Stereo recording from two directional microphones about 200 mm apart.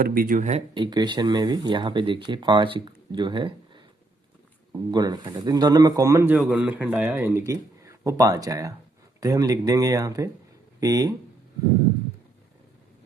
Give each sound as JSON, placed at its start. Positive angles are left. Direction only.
{"t": 0.0, "sound": "speech", "side_deg": -45}
{"t": 4.9, "sound": "a man's voice", "side_deg": -20}